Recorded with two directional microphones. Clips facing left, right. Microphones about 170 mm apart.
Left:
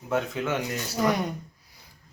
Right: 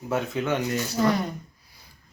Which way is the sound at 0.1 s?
Centre (ahead or behind).